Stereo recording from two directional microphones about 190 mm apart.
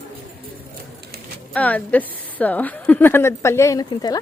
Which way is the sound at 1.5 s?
10° left (ahead or behind).